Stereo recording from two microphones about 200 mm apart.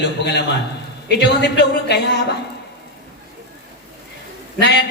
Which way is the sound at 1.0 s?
60° left (ahead or behind).